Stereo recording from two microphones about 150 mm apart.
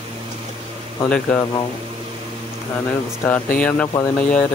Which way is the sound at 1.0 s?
10° left (ahead or behind).